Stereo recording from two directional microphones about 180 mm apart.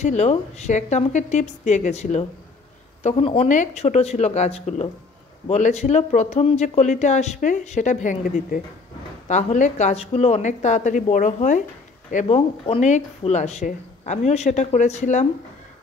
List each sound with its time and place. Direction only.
0.0 s speech: 40° left (ahead or behind)